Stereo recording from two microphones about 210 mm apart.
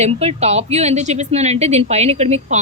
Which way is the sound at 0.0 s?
30° right (ahead or behind).